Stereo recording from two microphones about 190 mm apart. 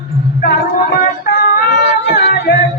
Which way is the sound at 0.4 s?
60° left (ahead or behind).